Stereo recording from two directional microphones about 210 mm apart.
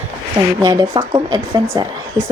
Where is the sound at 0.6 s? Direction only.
20° right (ahead or behind).